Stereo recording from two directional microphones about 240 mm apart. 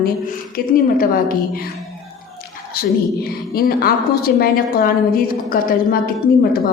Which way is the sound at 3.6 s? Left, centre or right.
Left.